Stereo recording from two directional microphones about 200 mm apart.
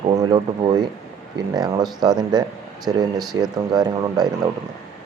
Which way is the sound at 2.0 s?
20° right (ahead or behind).